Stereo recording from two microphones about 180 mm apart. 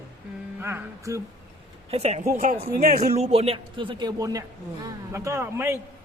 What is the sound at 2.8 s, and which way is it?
A man's voice, 50° right (ahead or behind).